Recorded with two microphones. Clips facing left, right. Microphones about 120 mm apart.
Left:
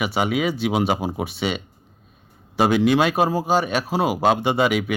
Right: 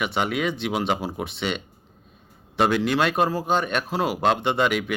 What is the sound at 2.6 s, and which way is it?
Speech, 10° left (ahead or behind).